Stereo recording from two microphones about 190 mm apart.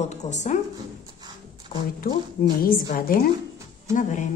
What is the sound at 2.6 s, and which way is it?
A woman's voice, 50° left (ahead or behind).